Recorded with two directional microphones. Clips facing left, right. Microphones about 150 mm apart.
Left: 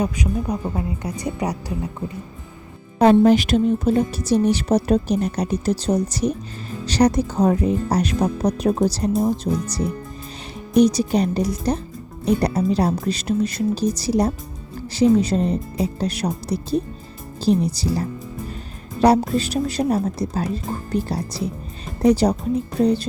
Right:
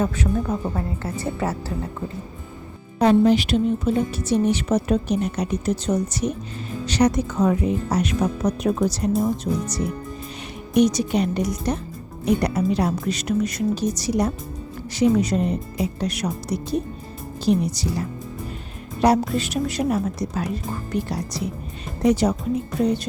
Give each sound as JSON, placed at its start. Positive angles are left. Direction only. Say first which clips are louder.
{"t": 0.0, "sound": "a woman's voice", "louder": "even", "side_deg": 15}
{"t": 3.0, "sound": "a woman's voice", "louder": "left 3 dB", "side_deg": 50}